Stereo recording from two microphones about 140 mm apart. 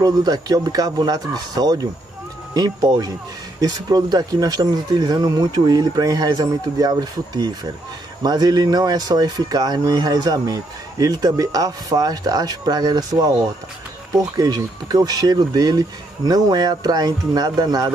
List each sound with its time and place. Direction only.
0.0 s speech: 30° right (ahead or behind)